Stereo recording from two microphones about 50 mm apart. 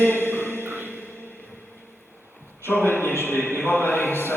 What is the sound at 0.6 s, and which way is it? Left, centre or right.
Music, right.